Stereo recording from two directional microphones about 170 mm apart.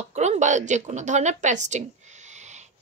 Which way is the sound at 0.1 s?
40° right (ahead or behind).